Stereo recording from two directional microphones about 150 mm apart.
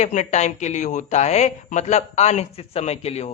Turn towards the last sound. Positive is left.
turn(degrees=45)  # may be behind; listen again after turning